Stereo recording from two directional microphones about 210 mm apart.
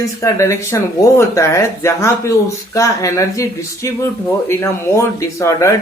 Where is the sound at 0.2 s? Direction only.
15° left (ahead or behind).